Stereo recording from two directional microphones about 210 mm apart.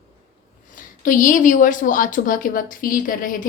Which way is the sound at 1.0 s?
40° left (ahead or behind).